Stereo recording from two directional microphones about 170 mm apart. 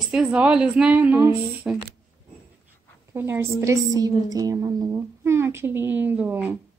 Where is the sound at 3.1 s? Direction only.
15° right (ahead or behind).